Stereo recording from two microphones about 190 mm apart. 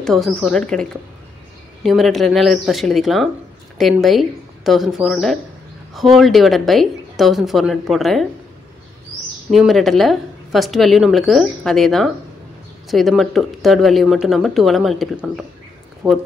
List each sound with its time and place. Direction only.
0.0 s a woman's voice: centre (ahead or behind)
9.5 s a woman's voice: centre (ahead or behind)
16.0 s speech: 20° right (ahead or behind)